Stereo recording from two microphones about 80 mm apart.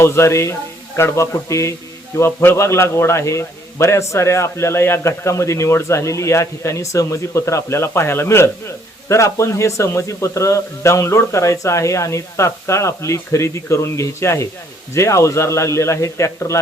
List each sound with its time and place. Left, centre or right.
0.0 s a man's voice: left